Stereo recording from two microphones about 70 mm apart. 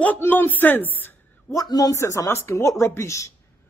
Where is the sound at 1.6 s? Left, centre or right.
Left.